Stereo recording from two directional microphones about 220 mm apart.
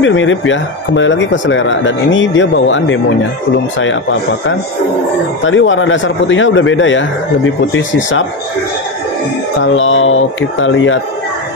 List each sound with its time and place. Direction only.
0.0 s speech: 60° left (ahead or behind)
5.4 s speech: 60° left (ahead or behind)
9.6 s speech: 60° left (ahead or behind)